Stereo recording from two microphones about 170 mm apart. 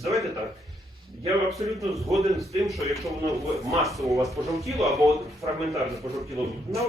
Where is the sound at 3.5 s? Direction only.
20° right (ahead or behind).